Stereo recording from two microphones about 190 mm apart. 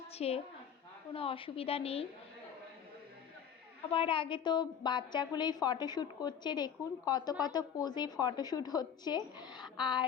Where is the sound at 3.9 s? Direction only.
30° left (ahead or behind).